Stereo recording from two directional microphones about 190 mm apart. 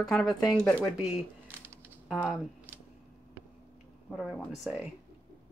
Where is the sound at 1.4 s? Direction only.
10° right (ahead or behind).